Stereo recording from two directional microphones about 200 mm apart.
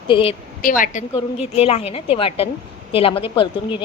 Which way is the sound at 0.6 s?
40° left (ahead or behind).